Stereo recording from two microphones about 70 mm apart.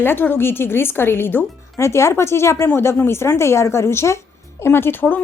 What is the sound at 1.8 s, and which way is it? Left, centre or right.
A woman's voice, left.